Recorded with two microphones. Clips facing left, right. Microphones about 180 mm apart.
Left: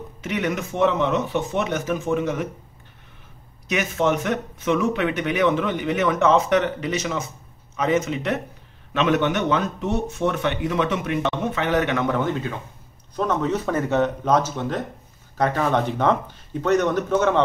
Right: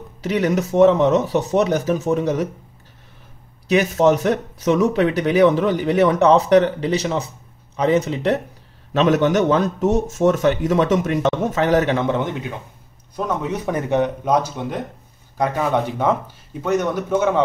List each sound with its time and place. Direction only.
0.2 s a man's voice: 35° right (ahead or behind)
3.6 s a man's voice: 35° right (ahead or behind); by 17.4 s 10° right (ahead or behind)